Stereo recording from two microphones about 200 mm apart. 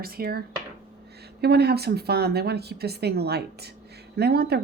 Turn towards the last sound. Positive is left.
turn(degrees=-55)  # may be behind; listen again after turning